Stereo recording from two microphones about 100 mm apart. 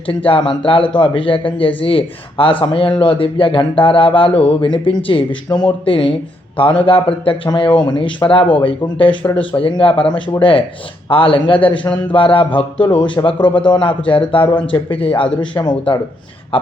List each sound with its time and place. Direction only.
0.1 s a man's voice: 65° left (ahead or behind)